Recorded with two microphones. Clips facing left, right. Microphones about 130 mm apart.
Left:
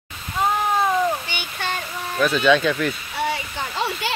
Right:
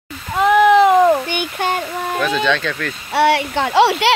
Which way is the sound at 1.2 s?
50° right (ahead or behind).